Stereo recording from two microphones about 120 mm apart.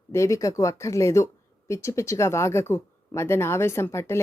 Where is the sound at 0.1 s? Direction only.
25° left (ahead or behind).